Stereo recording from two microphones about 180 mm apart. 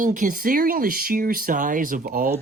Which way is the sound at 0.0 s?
45° right (ahead or behind).